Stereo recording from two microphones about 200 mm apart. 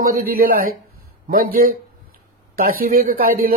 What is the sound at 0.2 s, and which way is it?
Speech, 45° right (ahead or behind).